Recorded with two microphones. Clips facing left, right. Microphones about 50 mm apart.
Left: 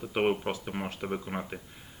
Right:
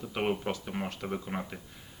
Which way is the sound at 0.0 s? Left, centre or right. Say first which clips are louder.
Left 3 dB; centre.